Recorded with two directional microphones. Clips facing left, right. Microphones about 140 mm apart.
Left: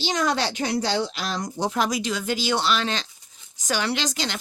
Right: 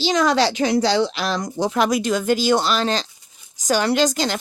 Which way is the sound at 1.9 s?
50° right (ahead or behind).